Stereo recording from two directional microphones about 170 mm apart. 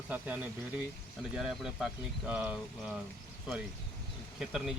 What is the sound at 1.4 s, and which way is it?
Speech, 5° right (ahead or behind).